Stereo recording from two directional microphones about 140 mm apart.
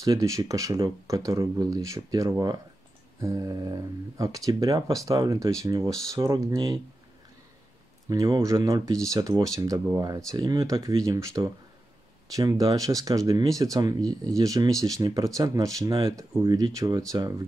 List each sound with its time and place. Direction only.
0.0 s speech: 25° right (ahead or behind)
8.1 s speech: 25° right (ahead or behind)